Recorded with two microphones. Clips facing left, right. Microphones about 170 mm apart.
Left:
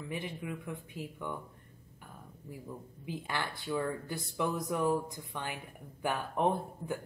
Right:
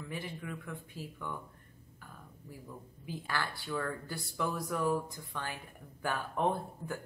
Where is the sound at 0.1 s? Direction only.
20° left (ahead or behind).